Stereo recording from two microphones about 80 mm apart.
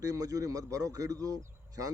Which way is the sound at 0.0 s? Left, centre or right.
Right.